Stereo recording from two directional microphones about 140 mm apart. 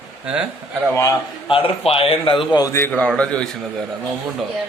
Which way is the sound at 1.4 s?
40° left (ahead or behind).